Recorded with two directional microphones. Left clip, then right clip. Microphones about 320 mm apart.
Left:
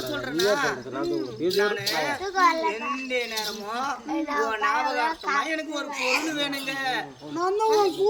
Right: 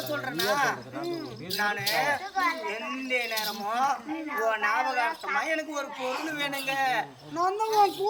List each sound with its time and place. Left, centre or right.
0.1 s speech: centre
2.3 s speech: centre
3.1 s speech: centre
4.1 s speech: centre
4.4 s speech: centre
5.0 s speech: centre
5.4 s speech: centre